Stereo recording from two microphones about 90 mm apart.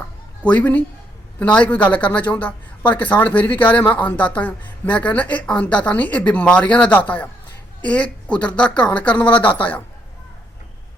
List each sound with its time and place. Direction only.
0.4 s speech: 15° left (ahead or behind)